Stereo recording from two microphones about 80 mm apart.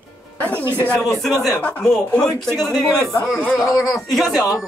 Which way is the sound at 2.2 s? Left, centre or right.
Centre.